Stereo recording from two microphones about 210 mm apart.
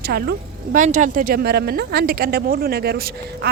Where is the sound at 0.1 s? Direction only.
45° right (ahead or behind).